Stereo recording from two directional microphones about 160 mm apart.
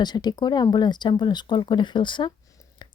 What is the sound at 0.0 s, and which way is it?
A woman's voice, 25° left (ahead or behind).